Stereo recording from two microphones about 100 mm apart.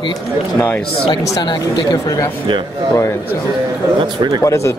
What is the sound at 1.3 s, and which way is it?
Speech, 45° left (ahead or behind).